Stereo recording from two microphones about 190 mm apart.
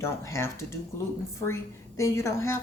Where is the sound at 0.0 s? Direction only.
15° left (ahead or behind).